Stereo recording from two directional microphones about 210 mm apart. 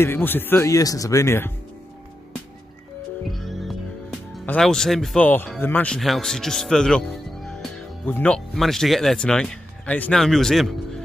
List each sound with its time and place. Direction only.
0.0 s speech: 10° left (ahead or behind)
3.3 s music: centre (ahead or behind)
4.5 s speech: 5° left (ahead or behind)